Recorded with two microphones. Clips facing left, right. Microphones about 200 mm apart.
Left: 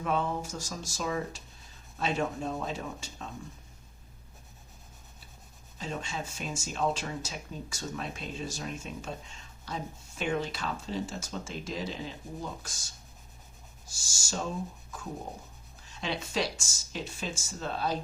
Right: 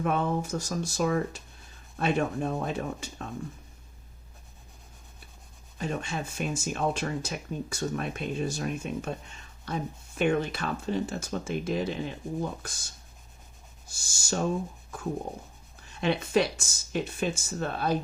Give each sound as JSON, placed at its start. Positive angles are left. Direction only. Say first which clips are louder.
{"t": 0.0, "sound": "speech", "louder": "right 3 dB", "side_deg": -55}
{"t": 5.7, "sound": "speech", "louder": "right 4 dB", "side_deg": -60}
{"t": 13.8, "sound": "speech", "louder": "right 3 dB", "side_deg": -60}
{"t": 15.9, "sound": "speech", "louder": "right 9 dB", "side_deg": -55}